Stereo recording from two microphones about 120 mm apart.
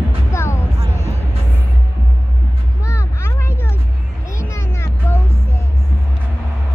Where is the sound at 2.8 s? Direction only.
25° left (ahead or behind).